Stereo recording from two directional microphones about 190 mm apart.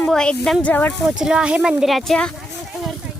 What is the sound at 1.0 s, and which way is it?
Speech, 5° right (ahead or behind).